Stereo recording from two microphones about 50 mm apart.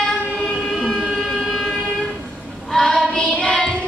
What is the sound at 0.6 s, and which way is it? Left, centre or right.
Train, centre.